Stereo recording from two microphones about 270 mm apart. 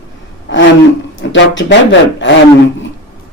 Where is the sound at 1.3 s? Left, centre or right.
Left.